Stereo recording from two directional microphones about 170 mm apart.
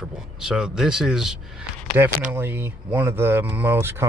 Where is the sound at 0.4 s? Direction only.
5° right (ahead or behind).